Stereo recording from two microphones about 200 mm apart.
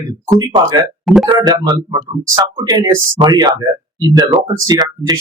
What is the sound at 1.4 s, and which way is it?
Speech, 20° right (ahead or behind).